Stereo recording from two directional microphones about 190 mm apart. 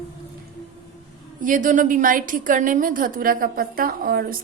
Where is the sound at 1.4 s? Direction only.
45° right (ahead or behind).